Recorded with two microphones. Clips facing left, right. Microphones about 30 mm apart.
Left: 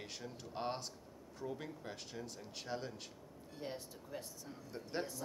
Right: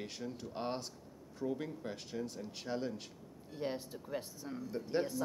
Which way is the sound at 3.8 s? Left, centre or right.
Right.